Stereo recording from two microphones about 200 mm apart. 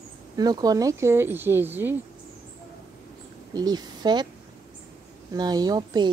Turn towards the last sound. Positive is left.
turn(degrees=-20)  # may be behind; listen again after turning